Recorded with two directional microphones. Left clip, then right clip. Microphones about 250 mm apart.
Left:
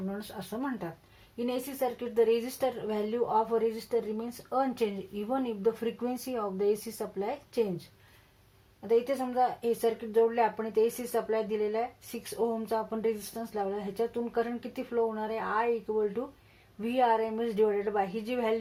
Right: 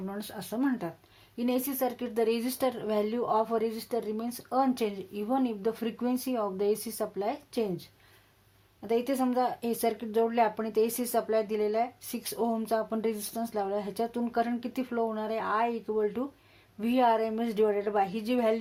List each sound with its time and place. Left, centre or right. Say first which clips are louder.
0.2 s speech: right 4 dB; right
8.9 s speech: left 1 dB; right